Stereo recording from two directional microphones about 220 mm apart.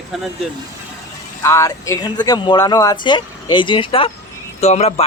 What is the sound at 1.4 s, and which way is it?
Speech, 15° left (ahead or behind).